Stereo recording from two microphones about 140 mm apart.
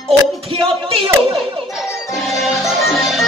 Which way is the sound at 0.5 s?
40° right (ahead or behind).